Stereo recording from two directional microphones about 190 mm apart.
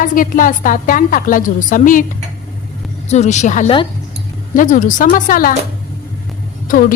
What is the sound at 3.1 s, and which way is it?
A woman's voice, 35° left (ahead or behind).